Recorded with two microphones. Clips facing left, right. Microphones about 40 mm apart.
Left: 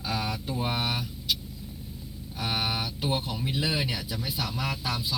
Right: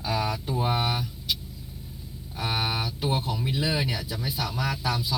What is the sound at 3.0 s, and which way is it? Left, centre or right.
Speech, centre.